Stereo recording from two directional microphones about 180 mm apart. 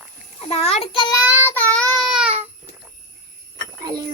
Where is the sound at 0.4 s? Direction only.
35° left (ahead or behind).